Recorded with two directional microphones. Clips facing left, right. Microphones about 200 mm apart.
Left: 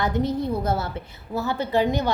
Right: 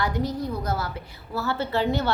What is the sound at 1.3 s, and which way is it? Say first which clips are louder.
Speech: left 3 dB; 15° left (ahead or behind).